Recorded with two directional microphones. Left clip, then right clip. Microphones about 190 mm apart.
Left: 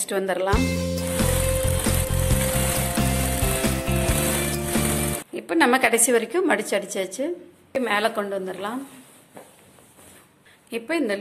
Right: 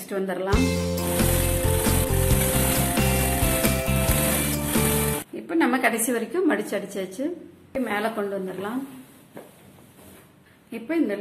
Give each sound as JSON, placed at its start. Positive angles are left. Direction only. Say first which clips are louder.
{"t": 0.1, "sound": "a woman's voice", "louder": "left 3 dB", "side_deg": 40}
{"t": 0.5, "sound": "music", "louder": "left 1 dB", "side_deg": 0}
{"t": 5.3, "sound": "a woman's voice", "louder": "left 5 dB", "side_deg": 50}
{"t": 10.7, "sound": "a woman's voice", "louder": "left 1 dB", "side_deg": 50}